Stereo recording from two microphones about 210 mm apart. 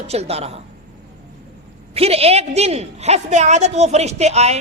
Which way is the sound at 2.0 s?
30° right (ahead or behind).